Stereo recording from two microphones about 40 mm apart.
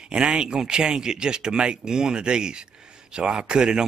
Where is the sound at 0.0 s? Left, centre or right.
Right.